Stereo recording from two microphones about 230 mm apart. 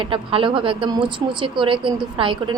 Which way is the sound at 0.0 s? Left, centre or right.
Right.